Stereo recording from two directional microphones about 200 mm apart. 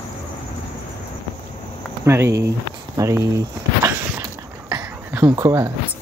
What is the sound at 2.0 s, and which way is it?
Speech, 15° right (ahead or behind).